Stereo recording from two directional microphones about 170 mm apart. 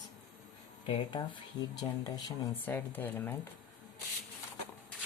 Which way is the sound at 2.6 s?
10° left (ahead or behind).